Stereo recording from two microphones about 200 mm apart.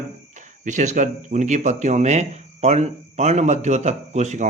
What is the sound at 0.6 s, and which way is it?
Speech, 35° right (ahead or behind).